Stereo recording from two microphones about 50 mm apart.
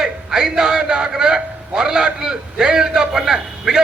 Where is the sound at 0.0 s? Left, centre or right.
Centre.